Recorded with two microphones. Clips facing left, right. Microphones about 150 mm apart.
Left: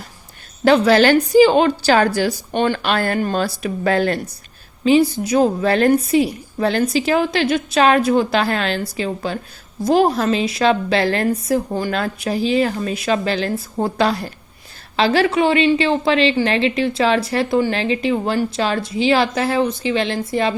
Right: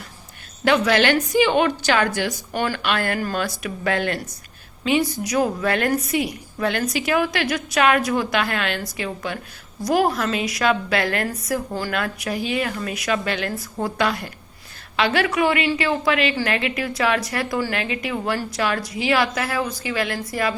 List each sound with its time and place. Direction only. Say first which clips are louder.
0.6 s a woman's voice: left 5 dB; 35° left (ahead or behind)
2.8 s a woman's voice: left 4 dB; 35° left (ahead or behind)